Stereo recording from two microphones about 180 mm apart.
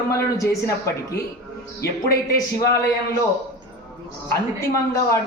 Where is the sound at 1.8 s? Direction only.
60° left (ahead or behind).